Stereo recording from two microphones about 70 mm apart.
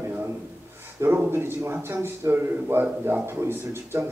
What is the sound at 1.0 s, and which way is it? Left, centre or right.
A man's voice, right.